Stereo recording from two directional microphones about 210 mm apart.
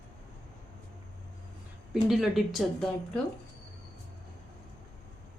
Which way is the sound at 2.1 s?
Centre (ahead or behind).